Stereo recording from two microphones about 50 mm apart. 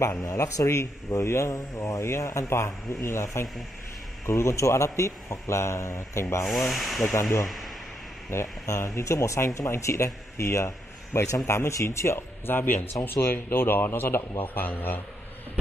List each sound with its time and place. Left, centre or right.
0.2 s speech: left
6.4 s speech: centre
8.3 s a man's voice: left